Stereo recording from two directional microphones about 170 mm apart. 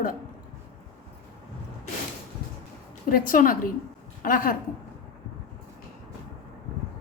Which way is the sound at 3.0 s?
55° left (ahead or behind).